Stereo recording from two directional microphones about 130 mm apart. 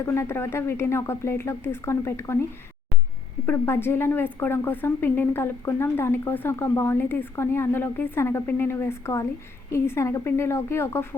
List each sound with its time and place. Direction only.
0.0 s speech: 20° left (ahead or behind)
3.4 s a woman's voice: 20° left (ahead or behind)